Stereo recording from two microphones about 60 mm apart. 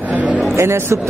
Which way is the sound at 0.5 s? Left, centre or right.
Right.